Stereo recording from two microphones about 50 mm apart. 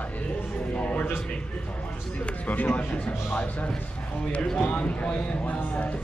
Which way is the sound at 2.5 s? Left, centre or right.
Left.